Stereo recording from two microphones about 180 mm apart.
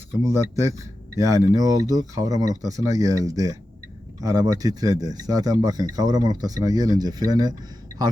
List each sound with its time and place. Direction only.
0.2 s speech: 15° right (ahead or behind)